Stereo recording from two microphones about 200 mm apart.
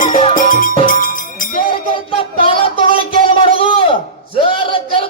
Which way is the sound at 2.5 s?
25° left (ahead or behind).